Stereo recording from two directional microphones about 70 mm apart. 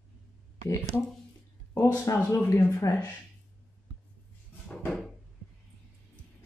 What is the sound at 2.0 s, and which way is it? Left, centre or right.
Speech, left.